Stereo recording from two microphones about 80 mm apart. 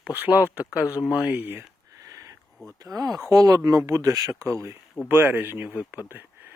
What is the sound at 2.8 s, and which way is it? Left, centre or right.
Speech, right.